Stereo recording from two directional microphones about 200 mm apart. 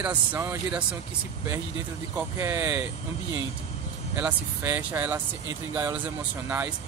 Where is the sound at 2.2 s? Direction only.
10° right (ahead or behind).